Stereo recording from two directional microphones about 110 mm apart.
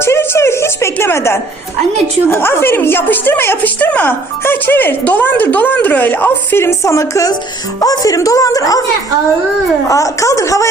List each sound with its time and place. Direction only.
0.0 s music: 25° left (ahead or behind)
2.3 s a woman's voice: 20° left (ahead or behind)
9.9 s a woman's voice: 30° left (ahead or behind)